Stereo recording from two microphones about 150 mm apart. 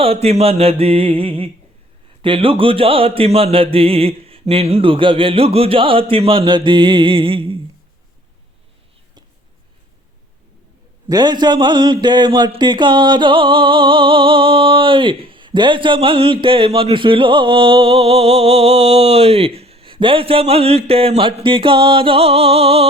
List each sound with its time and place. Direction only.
0.0 s speech: 40° right (ahead or behind)
11.1 s speech: 30° right (ahead or behind)